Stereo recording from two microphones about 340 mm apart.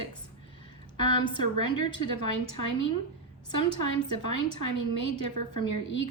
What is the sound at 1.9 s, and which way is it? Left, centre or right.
Speech, right.